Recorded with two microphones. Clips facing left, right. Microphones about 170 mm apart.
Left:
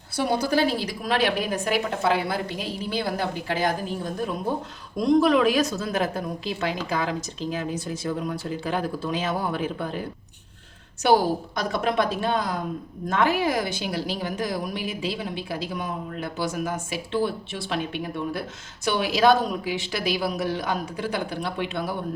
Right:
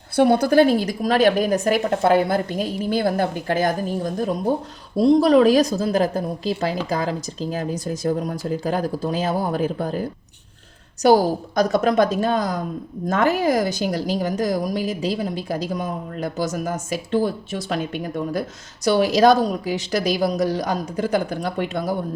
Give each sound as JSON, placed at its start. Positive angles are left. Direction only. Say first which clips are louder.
{"t": 0.2, "sound": "a woman's voice", "louder": "right 8 dB", "side_deg": -55}